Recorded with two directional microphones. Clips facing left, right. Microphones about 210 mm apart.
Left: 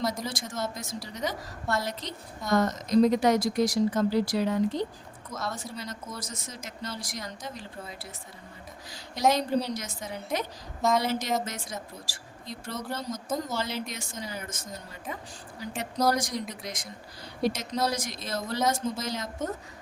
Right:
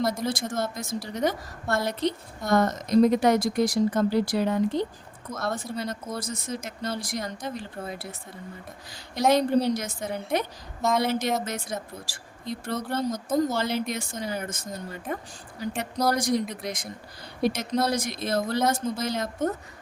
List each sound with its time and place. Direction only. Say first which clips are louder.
0.0 s a woman's voice: right 5 dB; 55° right (ahead or behind)
9.3 s a woman's voice: right 6 dB; 55° right (ahead or behind)
16.1 s a woman's voice: right 6 dB; 55° right (ahead or behind)